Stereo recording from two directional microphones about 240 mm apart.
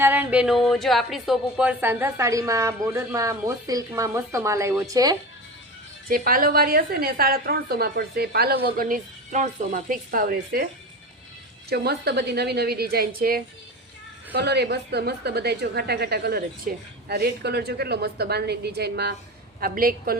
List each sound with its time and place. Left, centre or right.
0.0 s speech: centre
6.1 s a woman's voice: right
11.7 s a woman's voice: right